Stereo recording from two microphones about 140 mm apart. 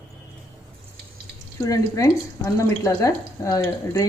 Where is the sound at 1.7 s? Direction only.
25° left (ahead or behind).